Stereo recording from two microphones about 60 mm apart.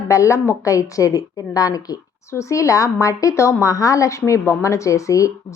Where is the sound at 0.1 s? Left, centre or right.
Left.